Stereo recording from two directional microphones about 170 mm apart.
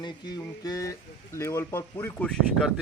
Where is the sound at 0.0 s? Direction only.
20° left (ahead or behind).